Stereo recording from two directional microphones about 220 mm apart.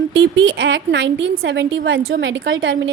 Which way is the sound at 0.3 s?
55° right (ahead or behind).